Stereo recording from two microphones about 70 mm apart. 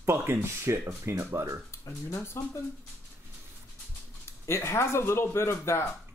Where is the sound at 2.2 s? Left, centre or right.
Left.